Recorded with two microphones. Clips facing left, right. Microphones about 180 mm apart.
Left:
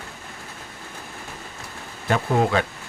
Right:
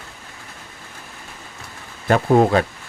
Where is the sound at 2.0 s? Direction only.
45° right (ahead or behind).